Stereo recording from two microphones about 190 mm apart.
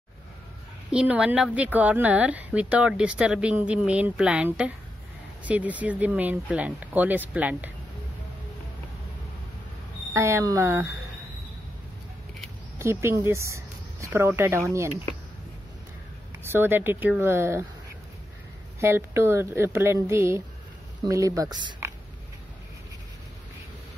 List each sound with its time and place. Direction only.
0.9 s speech: 5° right (ahead or behind)
10.1 s speech: 15° right (ahead or behind)
12.7 s speech: 15° right (ahead or behind)
16.4 s speech: 10° right (ahead or behind)
18.8 s speech: 15° right (ahead or behind)